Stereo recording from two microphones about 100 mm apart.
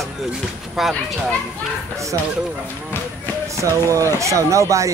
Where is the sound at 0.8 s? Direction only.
5° right (ahead or behind).